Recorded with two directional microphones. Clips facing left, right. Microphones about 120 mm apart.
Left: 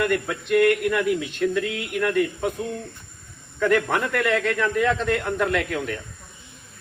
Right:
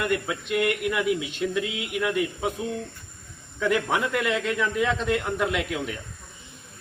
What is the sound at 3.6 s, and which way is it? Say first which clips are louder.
A man's voice: left 3 dB; 10° right (ahead or behind).